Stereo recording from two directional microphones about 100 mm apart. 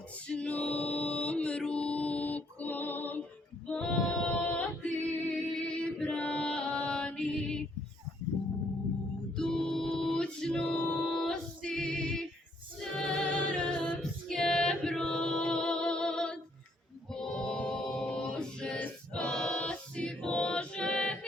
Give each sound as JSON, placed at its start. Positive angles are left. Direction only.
{"t": 0.3, "sound": "music", "side_deg": 10}
{"t": 3.7, "sound": "female singing", "side_deg": 5}
{"t": 5.5, "sound": "a sound", "side_deg": 10}
{"t": 9.3, "sound": "music", "side_deg": 5}
{"t": 12.8, "sound": "female singing", "side_deg": 5}
{"t": 17.1, "sound": "choir", "side_deg": 5}